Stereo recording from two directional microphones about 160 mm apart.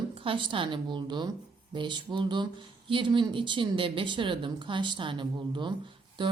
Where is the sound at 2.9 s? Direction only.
30° right (ahead or behind).